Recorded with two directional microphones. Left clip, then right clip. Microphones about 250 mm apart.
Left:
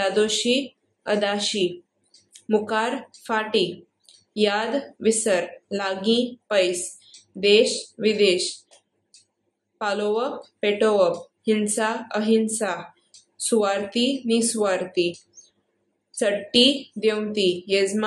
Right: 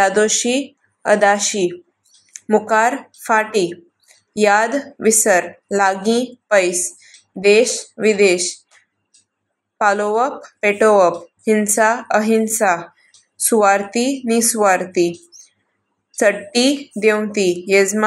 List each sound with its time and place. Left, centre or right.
0.0 s a woman's voice: right
9.8 s a woman's voice: right
16.2 s a woman's voice: right